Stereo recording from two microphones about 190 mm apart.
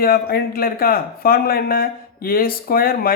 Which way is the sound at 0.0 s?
55° left (ahead or behind).